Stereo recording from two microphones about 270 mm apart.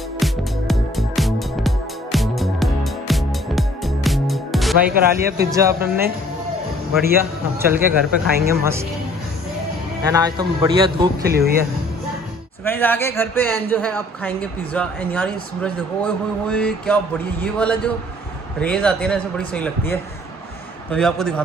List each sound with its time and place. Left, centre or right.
0.2 s music: centre
4.9 s speech: right
5.5 s a man's voice: centre
7.9 s speech: right
10.0 s a man's voice: centre
11.2 s speech: right
12.6 s a man's voice: centre